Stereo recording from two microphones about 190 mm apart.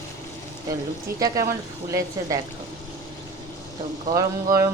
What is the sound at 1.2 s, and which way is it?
Speech, 15° right (ahead or behind).